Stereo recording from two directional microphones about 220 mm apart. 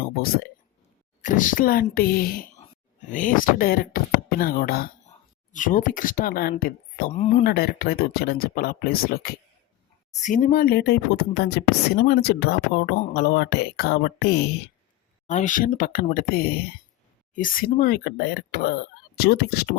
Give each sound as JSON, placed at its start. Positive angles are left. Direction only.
{"t": 1.2, "sound": "speech", "side_deg": 35}
{"t": 7.4, "sound": "speech", "side_deg": 45}
{"t": 10.1, "sound": "speech", "side_deg": 35}
{"t": 15.3, "sound": "speech", "side_deg": 35}